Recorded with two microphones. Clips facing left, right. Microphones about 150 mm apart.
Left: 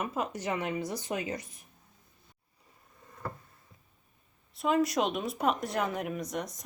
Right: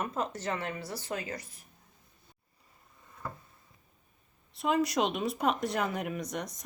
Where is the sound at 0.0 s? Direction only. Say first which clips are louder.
Even; 10° left (ahead or behind).